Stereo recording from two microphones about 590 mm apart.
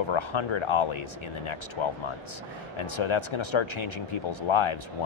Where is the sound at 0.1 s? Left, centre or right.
Left.